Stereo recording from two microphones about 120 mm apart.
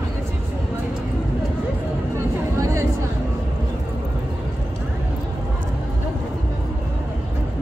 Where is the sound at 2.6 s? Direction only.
25° right (ahead or behind).